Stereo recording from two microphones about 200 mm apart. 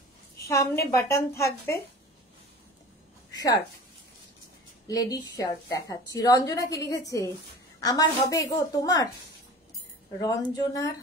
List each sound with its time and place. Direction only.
0.5 s a woman's voice: 15° left (ahead or behind)
4.8 s a woman's voice: 20° left (ahead or behind)
10.2 s speech: 20° left (ahead or behind)